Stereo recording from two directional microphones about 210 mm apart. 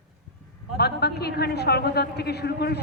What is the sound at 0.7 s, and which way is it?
A man's voice, 50° left (ahead or behind).